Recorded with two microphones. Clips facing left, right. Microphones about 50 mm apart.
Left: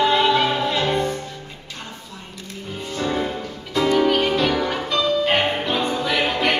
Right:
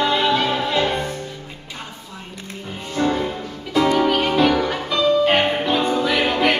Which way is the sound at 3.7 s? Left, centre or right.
Centre.